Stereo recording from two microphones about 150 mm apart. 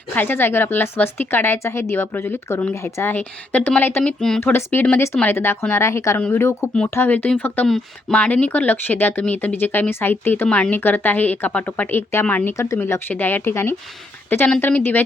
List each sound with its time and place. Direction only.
0.1 s speech: 15° left (ahead or behind)